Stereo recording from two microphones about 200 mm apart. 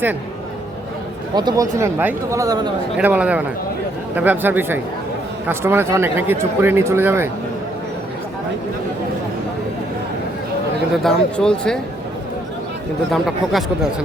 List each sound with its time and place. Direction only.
1.4 s speech: 20° right (ahead or behind)
10.9 s speech: 5° left (ahead or behind)
13.2 s speech: centre (ahead or behind)